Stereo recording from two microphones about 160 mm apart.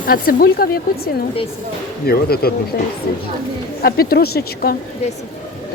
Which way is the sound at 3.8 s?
75° left (ahead or behind).